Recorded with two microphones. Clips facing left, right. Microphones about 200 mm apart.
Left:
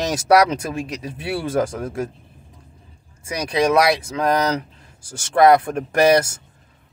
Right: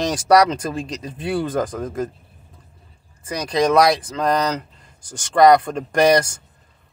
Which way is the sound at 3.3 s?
10° left (ahead or behind).